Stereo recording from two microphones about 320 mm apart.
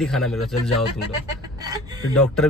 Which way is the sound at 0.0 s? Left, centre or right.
Centre.